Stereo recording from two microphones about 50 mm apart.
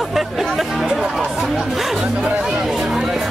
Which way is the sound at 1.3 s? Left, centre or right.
Centre.